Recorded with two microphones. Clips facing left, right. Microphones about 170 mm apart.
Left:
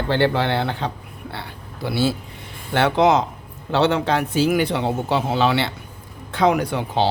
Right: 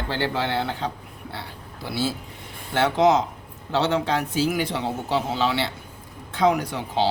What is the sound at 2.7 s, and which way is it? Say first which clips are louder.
Speech: left 2 dB; 65° left (ahead or behind).